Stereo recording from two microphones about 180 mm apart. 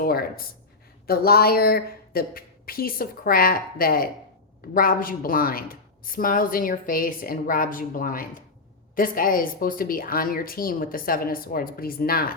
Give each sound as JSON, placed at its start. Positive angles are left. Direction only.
{"t": 0.0, "sound": "a woman's voice", "side_deg": 55}